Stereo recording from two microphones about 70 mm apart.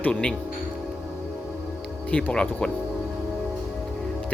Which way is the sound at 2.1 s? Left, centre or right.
Centre.